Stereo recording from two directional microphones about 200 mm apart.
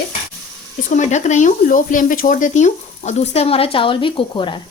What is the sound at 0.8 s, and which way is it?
Speech, 40° left (ahead or behind).